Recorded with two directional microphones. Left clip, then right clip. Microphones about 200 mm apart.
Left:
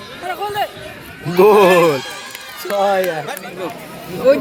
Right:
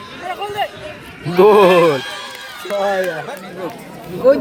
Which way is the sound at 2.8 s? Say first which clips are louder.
Left 2 dB; 20° left (ahead or behind).